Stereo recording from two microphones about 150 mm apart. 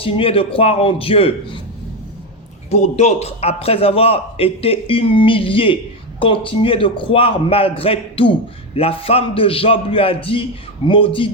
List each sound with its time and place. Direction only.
0.0 s a man's voice: 40° left (ahead or behind)
2.6 s a man's voice: 45° left (ahead or behind)